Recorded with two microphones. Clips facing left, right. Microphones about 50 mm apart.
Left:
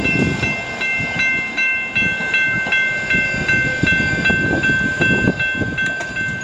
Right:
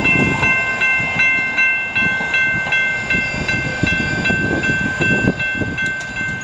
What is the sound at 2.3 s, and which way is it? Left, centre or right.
Train, centre.